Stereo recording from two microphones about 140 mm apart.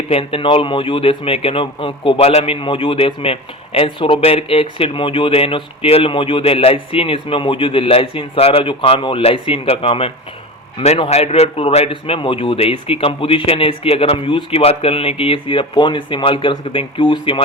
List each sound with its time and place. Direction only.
0.1 s speech: 40° left (ahead or behind)